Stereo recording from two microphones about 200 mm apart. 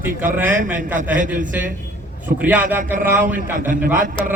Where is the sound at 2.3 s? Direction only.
10° right (ahead or behind).